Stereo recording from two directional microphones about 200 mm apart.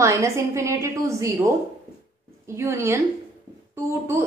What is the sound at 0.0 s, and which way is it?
A woman's voice, 15° right (ahead or behind).